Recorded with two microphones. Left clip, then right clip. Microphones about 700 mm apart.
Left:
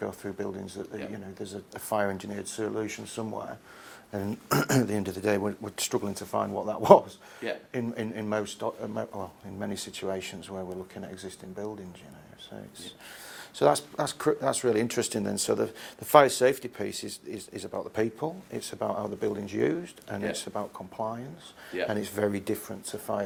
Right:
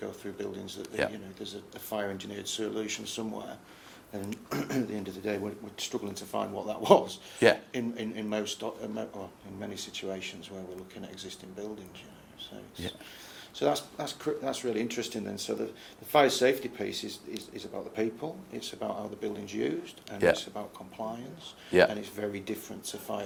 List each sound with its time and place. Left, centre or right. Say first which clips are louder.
0.0 s speech: left 4 dB; left
13.6 s speech: left 5 dB; left
22.2 s speech: left 7 dB; left